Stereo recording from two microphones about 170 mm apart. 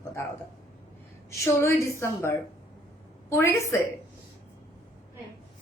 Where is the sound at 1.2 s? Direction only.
15° left (ahead or behind).